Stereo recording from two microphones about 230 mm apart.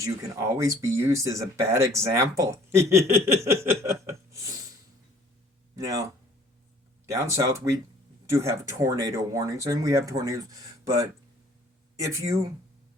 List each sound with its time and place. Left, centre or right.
0.0 s speech: centre
7.1 s speech: centre